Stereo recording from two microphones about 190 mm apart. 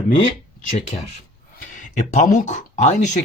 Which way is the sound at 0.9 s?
40° left (ahead or behind).